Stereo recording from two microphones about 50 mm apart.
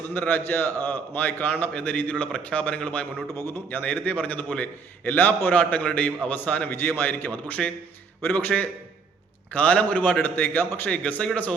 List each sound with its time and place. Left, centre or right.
0.1 s a man's voice: left
3.3 s a man's voice: left
3.8 s a man's voice: left
6.8 s a man's voice: left
7.1 s a man's voice: left